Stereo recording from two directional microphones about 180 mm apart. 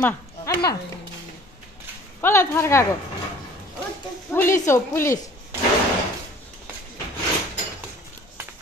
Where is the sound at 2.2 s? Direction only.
15° left (ahead or behind).